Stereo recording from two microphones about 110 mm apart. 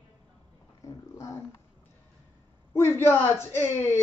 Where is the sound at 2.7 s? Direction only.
25° left (ahead or behind).